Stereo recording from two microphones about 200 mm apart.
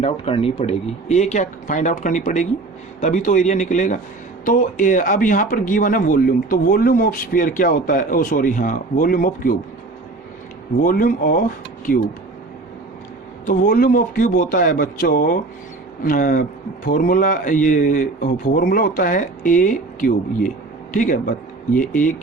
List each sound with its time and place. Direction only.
0.0 s speech: 30° left (ahead or behind)
10.8 s speech: 45° left (ahead or behind)
13.4 s speech: 40° left (ahead or behind)